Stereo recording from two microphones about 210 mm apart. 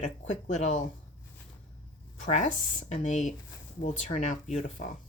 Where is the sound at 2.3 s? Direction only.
35° left (ahead or behind).